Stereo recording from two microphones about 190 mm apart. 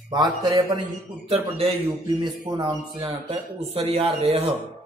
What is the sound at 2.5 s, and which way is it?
Speech, 25° right (ahead or behind).